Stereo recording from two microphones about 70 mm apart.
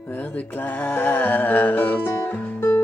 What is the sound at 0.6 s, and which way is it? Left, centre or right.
Music, left.